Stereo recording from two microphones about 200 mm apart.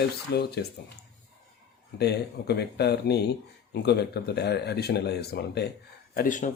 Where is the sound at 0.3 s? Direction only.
55° left (ahead or behind).